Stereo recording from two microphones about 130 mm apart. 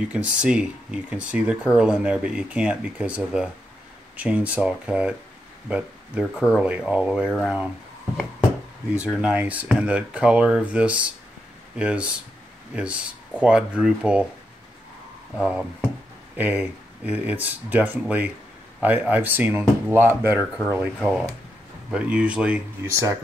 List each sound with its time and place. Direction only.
0.1 s speech: 10° right (ahead or behind)
8.9 s speech: 10° right (ahead or behind)
15.3 s speech: 5° right (ahead or behind)
22.8 s speech: 25° right (ahead or behind)